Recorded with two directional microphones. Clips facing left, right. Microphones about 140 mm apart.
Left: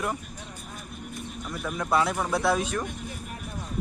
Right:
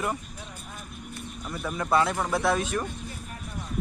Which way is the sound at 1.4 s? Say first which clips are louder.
Right 1 dB; centre (ahead or behind).